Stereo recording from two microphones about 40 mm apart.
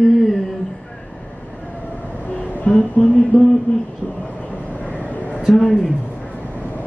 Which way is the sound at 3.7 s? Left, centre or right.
Left.